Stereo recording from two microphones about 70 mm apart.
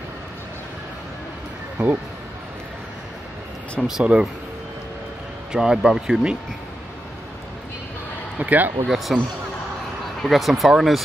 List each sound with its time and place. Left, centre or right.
1.8 s a man's voice: centre
3.8 s a man's voice: centre
5.5 s a man's voice: centre
8.4 s speech: right
8.8 s speech: centre
10.2 s speech: centre